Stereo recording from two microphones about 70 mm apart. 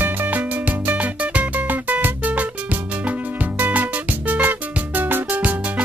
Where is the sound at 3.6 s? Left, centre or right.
Right.